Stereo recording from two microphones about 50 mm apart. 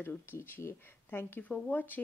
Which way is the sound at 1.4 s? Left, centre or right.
Left.